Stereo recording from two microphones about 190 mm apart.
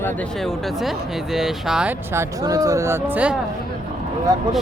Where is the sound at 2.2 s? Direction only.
20° right (ahead or behind).